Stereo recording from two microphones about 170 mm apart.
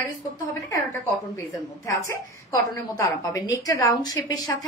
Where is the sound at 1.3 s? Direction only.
20° left (ahead or behind).